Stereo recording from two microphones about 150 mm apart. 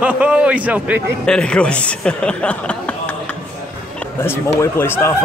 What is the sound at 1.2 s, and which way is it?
Speech, 5° left (ahead or behind).